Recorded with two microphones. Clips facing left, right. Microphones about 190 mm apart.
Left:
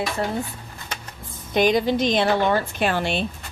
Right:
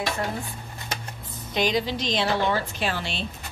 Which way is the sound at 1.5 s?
50° left (ahead or behind).